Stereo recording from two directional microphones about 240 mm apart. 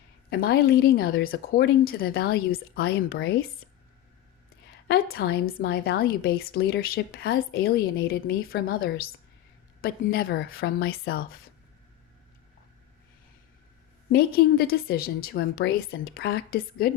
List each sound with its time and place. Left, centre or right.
0.3 s a woman's voice: left
4.9 s a woman's voice: left
14.1 s a woman's voice: left